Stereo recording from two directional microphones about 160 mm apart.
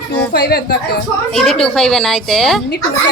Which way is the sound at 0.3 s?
90° left.